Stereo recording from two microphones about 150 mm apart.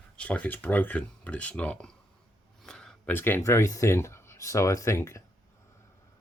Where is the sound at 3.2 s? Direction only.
15° left (ahead or behind).